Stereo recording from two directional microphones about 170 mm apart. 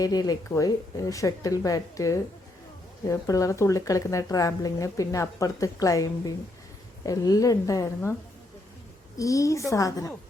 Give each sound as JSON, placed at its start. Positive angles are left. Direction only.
{"t": 0.0, "sound": "speech", "side_deg": 20}
{"t": 9.1, "sound": "speech", "side_deg": 20}